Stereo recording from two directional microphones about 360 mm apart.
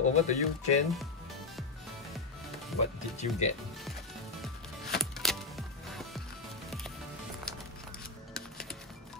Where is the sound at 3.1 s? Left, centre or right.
Centre.